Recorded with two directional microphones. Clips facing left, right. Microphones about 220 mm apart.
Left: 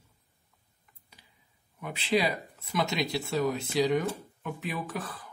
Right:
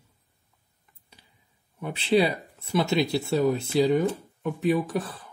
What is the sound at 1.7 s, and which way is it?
Speech, 30° right (ahead or behind).